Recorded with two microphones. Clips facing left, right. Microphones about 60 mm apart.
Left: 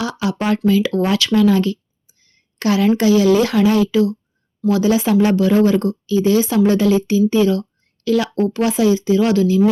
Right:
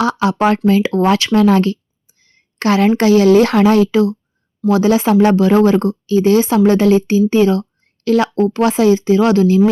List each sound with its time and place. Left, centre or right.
0.0 s speech: right
0.8 s a woman's voice: right
1.3 s a woman's voice: right
6.1 s a woman's voice: right